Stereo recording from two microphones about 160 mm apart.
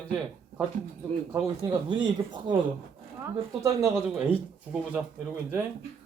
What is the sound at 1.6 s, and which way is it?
Speech, 30° right (ahead or behind).